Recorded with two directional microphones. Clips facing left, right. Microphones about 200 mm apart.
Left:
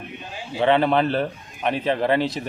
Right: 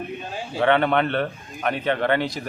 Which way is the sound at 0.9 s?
30° left (ahead or behind).